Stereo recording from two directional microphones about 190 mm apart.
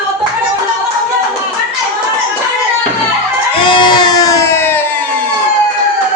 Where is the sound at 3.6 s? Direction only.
25° left (ahead or behind).